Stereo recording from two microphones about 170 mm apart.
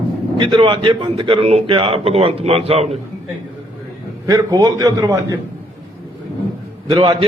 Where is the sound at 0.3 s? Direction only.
25° right (ahead or behind).